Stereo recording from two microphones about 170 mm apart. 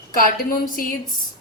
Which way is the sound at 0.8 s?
60° left (ahead or behind).